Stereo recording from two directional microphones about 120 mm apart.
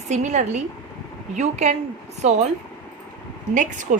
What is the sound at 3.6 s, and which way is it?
Speech, 90° right.